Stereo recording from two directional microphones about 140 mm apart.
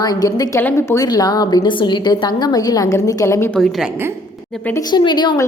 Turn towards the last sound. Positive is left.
turn(degrees=30)  # may be behind; listen again after turning